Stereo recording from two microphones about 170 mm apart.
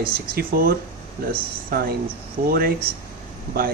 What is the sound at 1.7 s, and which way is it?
Speech, 60° right (ahead or behind).